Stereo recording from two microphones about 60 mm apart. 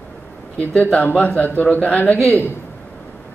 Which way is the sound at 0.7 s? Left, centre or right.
Centre.